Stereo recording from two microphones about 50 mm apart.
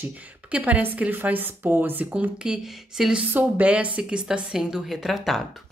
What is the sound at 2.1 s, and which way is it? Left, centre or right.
Speech, right.